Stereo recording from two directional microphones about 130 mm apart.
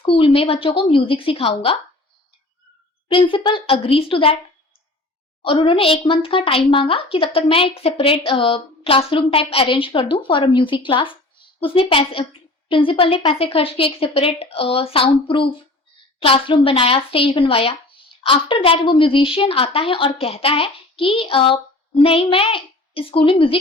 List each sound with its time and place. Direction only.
0.0 s speech: 45° left (ahead or behind)
3.1 s speech: 40° left (ahead or behind)
5.5 s speech: 45° left (ahead or behind)